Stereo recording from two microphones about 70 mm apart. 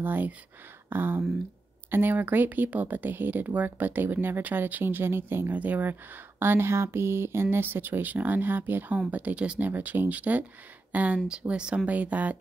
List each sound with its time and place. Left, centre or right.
0.0 s speech: right
9.0 s speech: centre
9.7 s speech: right